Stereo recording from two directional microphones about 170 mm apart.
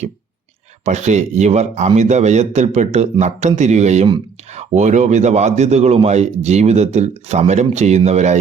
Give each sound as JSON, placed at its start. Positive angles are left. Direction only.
{"t": 0.9, "sound": "a man's voice", "side_deg": -40}